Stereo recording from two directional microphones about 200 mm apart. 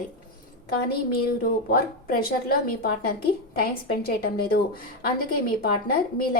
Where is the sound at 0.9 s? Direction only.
50° left (ahead or behind).